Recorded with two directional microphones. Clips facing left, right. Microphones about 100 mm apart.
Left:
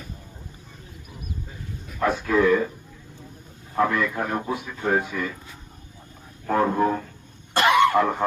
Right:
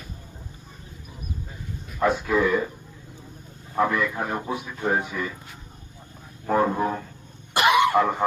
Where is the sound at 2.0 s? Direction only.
10° right (ahead or behind).